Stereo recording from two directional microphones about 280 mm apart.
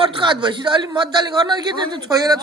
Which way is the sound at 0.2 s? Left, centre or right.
Centre.